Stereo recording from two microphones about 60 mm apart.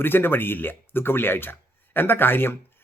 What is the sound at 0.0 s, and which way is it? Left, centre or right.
Speech, left.